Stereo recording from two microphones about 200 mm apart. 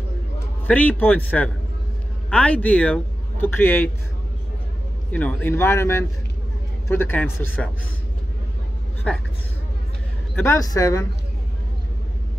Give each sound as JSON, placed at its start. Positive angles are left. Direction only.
{"t": 0.7, "sound": "a man's voice", "side_deg": 10}
{"t": 5.1, "sound": "speech", "side_deg": 10}
{"t": 9.1, "sound": "speech", "side_deg": 5}
{"t": 10.3, "sound": "speech", "side_deg": 15}